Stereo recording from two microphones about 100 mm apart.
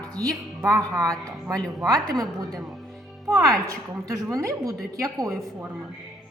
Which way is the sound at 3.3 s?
35° right (ahead or behind).